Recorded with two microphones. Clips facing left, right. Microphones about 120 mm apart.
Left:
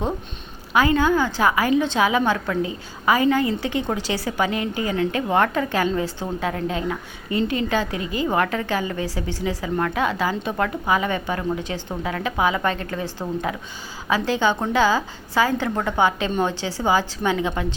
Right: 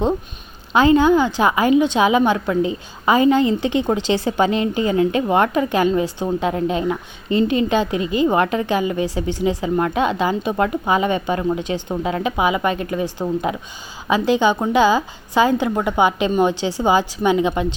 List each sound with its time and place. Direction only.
0.7 s a woman's voice: 25° right (ahead or behind)